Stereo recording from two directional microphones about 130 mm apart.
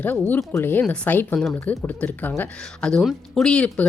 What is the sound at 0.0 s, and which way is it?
A woman's voice, 15° left (ahead or behind).